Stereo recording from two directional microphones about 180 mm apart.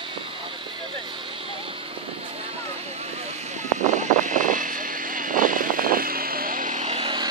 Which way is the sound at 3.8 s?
40° right (ahead or behind).